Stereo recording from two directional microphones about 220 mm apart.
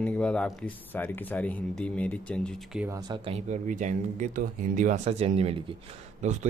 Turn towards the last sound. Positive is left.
turn(degrees=-35)  # may be behind; listen again after turning